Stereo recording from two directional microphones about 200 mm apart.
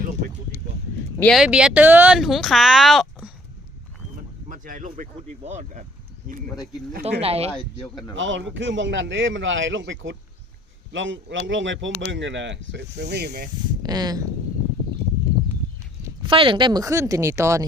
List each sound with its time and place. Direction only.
1.2 s speech: centre (ahead or behind)
4.4 s a sound: 40° right (ahead or behind)
5.5 s speech: 35° right (ahead or behind)
7.0 s speech: 30° right (ahead or behind)
8.1 s a man's voice: 70° right (ahead or behind); by 13.5 s 50° right (ahead or behind)
13.8 s speech: 20° right (ahead or behind)
16.0 s speech: 25° right (ahead or behind)